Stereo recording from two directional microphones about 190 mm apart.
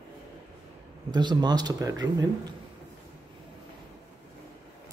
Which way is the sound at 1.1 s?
25° right (ahead or behind).